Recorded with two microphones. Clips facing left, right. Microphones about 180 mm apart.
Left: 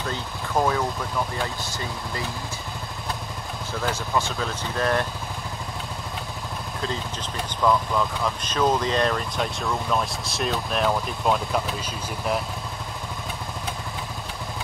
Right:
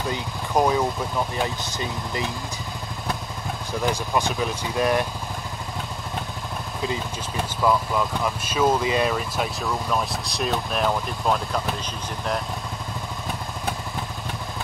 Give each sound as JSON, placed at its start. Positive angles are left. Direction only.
{"t": 0.1, "sound": "speech", "side_deg": -15}
{"t": 3.7, "sound": "speech", "side_deg": -15}
{"t": 7.6, "sound": "speech", "side_deg": -5}